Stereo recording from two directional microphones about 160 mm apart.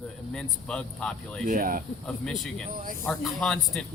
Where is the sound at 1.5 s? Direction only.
60° right (ahead or behind).